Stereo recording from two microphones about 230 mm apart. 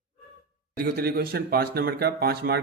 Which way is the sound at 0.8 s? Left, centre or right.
Right.